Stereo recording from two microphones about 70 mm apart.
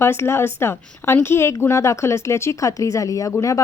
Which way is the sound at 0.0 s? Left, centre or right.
Left.